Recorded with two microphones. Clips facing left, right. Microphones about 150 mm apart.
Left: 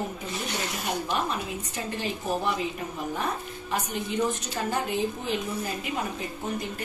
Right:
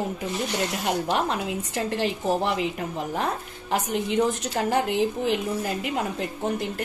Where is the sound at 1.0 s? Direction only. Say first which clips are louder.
Right 4 dB; 90° right.